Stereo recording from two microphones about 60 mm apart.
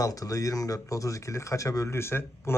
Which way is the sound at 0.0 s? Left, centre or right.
Left.